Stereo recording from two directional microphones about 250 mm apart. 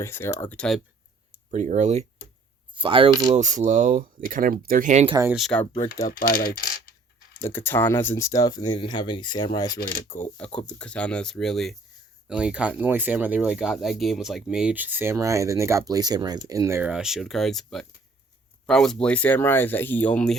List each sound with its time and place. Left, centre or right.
0.0 s speech: centre
1.5 s speech: right
3.3 s speech: right
5.1 s speech: centre
5.4 s speech: centre
5.7 s speech: left
7.4 s speech: centre
10.3 s speech: centre